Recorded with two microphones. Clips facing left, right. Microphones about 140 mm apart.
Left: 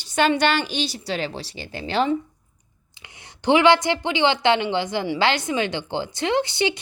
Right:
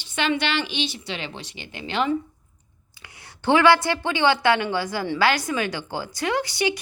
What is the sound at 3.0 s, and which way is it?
A woman's voice, 20° left (ahead or behind).